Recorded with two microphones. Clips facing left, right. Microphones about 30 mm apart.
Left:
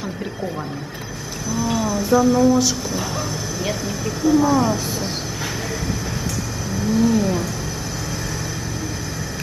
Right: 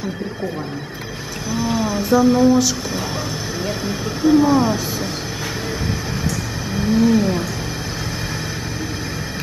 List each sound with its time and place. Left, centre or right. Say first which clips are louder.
1.6 s speech: right 1 dB; right
3.8 s speech: right 4 dB; right
6.9 s speech: right 2 dB; right